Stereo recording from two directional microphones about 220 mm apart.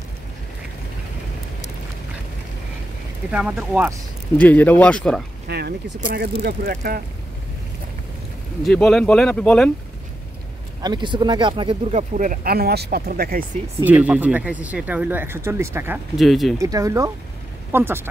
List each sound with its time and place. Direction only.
3.3 s speech: 5° right (ahead or behind)
4.4 s speech: 5° left (ahead or behind)
5.5 s speech: 45° right (ahead or behind)
8.6 s speech: 5° left (ahead or behind)
10.8 s speech: 20° right (ahead or behind); by 13.5 s 40° right (ahead or behind)
13.7 s speech: 5° right (ahead or behind)
16.2 s speech: centre (ahead or behind)
16.5 s speech: 15° right (ahead or behind)